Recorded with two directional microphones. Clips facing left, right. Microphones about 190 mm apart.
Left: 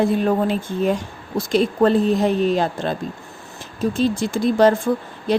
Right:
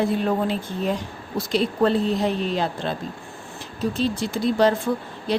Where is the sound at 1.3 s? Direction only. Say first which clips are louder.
Left 4 dB; 45° left (ahead or behind).